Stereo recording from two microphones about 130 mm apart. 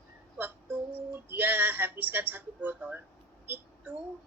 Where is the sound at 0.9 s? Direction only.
15° right (ahead or behind).